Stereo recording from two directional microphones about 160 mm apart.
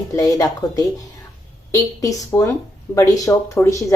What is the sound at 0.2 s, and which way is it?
Speech, 25° left (ahead or behind).